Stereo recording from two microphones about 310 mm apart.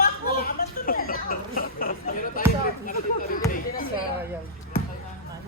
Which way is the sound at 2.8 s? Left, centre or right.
Left.